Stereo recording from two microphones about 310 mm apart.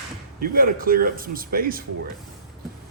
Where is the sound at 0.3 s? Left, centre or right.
Right.